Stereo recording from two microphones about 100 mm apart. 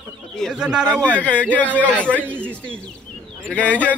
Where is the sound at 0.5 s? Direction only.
10° right (ahead or behind).